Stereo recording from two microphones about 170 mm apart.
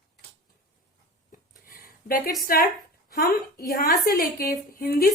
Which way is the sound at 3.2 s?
60° left (ahead or behind).